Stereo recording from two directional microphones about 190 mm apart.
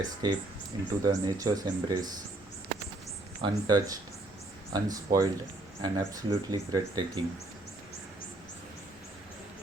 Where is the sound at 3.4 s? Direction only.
20° right (ahead or behind).